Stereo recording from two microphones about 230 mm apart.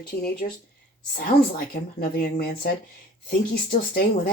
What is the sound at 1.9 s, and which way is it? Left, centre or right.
Speech, left.